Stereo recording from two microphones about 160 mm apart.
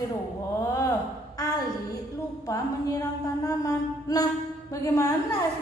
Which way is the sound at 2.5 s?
20° left (ahead or behind).